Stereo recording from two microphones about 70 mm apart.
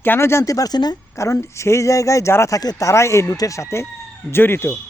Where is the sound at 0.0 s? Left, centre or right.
Left.